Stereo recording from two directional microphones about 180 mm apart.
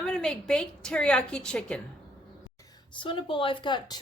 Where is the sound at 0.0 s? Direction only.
5° left (ahead or behind).